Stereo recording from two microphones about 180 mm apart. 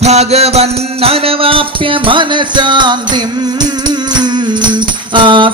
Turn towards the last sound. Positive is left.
turn(degrees=-25)  # may be behind; listen again after turning